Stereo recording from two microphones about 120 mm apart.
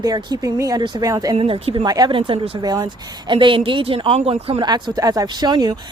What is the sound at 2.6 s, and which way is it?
A woman's voice, 35° right (ahead or behind).